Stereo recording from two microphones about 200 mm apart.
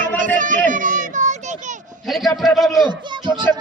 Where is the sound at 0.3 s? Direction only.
40° right (ahead or behind).